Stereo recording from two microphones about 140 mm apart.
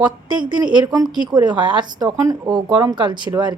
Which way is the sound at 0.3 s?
30° right (ahead or behind).